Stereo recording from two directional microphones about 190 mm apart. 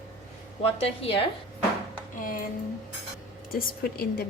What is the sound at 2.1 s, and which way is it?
Speech, 45° left (ahead or behind).